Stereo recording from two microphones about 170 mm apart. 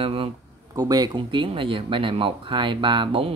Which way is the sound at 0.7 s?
20° right (ahead or behind).